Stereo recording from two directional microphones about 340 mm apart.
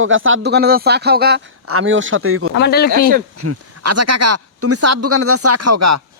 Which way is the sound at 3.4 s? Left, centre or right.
Right.